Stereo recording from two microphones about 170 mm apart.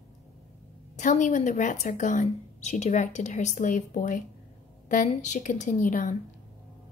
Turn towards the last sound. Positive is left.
turn(degrees=50)  # may be behind; listen again after turning